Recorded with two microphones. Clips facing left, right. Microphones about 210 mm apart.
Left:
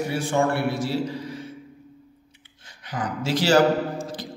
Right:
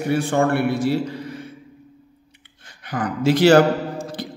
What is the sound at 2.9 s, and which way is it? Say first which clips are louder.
Speech: right 7 dB; 60° right (ahead or behind).